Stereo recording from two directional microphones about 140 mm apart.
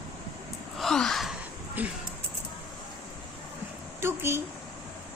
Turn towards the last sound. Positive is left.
turn(degrees=-15)  # may be behind; listen again after turning